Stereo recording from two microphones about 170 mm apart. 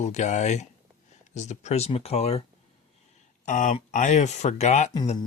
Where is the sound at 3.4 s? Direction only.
45° left (ahead or behind).